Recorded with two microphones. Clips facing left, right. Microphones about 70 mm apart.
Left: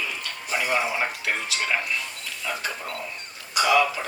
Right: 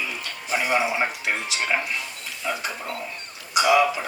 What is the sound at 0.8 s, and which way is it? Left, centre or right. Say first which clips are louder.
Speech: right 2 dB; right.